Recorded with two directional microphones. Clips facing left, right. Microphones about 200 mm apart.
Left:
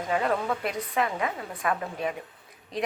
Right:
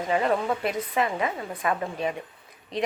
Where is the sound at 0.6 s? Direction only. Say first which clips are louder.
Right 2 dB; centre (ahead or behind).